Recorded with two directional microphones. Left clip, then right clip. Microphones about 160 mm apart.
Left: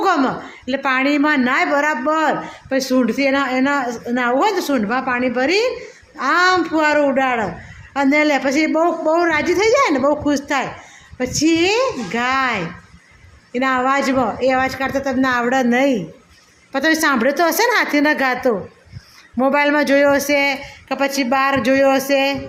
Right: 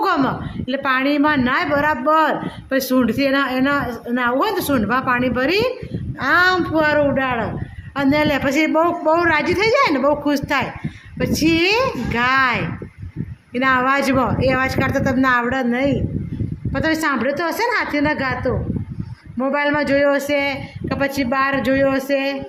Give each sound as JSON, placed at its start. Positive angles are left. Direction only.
{"t": 0.0, "sound": "a woman's voice", "side_deg": 20}